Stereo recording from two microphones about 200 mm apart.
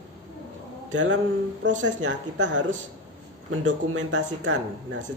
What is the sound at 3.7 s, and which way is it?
Speech, 70° right (ahead or behind).